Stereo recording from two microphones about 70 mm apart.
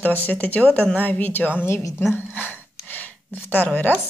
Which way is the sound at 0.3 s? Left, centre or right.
Left.